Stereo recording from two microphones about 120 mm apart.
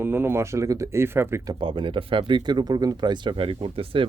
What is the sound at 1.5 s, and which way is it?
Speech, 45° right (ahead or behind).